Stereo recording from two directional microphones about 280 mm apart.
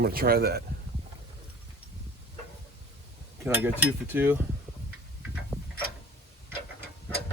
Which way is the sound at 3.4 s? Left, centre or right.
Centre.